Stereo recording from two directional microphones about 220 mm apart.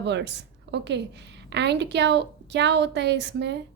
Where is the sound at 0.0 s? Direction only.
50° right (ahead or behind).